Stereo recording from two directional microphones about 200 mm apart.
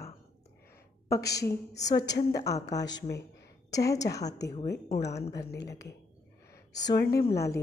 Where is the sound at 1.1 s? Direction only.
15° left (ahead or behind).